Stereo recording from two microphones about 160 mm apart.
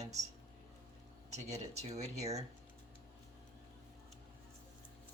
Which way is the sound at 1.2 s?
45° right (ahead or behind).